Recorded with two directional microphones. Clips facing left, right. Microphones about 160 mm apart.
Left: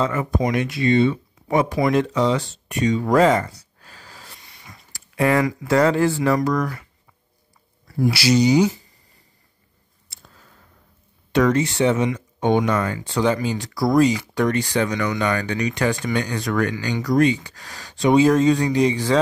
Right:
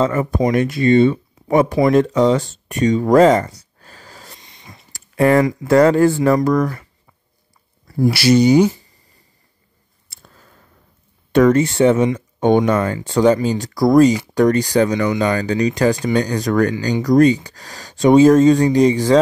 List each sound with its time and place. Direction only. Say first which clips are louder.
0.0 s speech: right 5 dB; 45° right (ahead or behind)
4.4 s a sound: right 3 dB; 25° right (ahead or behind)
4.9 s speech: right 5 dB; 45° right (ahead or behind)
8.1 s speech: right 5 dB; 55° right (ahead or behind)
11.3 s speech: right 5 dB; 50° right (ahead or behind)
14.9 s speech: right 5 dB; 25° right (ahead or behind); by 19.1 s 40° right (ahead or behind)